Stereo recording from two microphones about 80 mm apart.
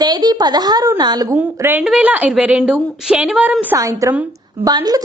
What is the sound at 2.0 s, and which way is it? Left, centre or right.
A woman's voice, centre.